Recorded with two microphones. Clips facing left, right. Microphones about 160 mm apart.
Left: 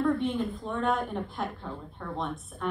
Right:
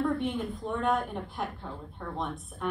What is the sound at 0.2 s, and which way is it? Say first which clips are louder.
A woman's voice: left 2 dB; 15° right (ahead or behind).